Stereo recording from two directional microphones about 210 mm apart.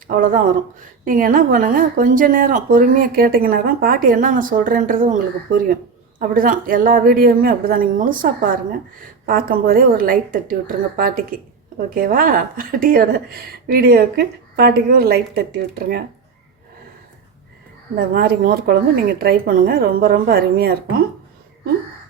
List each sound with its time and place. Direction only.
0.1 s a woman's voice: 40° right (ahead or behind)
17.9 s a woman's voice: 45° right (ahead or behind)